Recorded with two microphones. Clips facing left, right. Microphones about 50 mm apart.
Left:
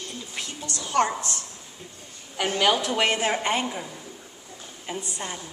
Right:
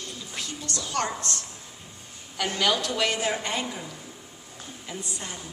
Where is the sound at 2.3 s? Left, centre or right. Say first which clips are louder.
Left 3 dB; left.